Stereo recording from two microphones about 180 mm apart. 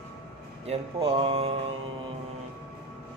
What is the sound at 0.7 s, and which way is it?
Speech, 35° right (ahead or behind).